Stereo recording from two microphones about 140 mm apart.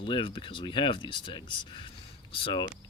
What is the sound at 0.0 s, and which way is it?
Speech, 35° left (ahead or behind).